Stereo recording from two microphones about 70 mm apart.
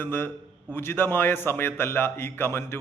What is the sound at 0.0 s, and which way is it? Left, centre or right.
A man's voice, left.